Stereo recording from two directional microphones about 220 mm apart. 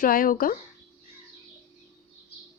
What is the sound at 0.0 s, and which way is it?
Speech, 40° left (ahead or behind).